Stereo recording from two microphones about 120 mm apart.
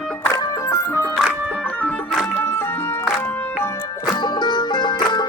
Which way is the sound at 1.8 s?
Centre (ahead or behind).